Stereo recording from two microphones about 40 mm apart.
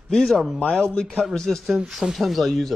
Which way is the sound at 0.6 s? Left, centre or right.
Left.